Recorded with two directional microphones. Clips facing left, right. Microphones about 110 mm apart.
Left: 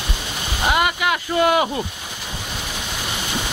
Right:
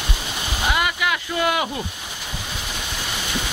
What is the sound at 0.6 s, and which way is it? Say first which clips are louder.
Speech: left 3 dB; 45° left (ahead or behind).